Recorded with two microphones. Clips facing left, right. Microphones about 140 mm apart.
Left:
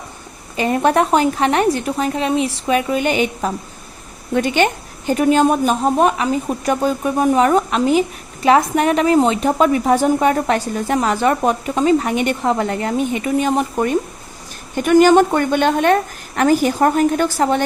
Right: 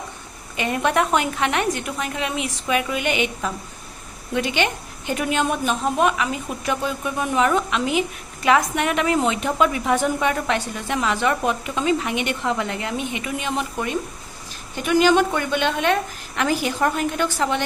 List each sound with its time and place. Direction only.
0.5 s a woman's voice: 35° left (ahead or behind)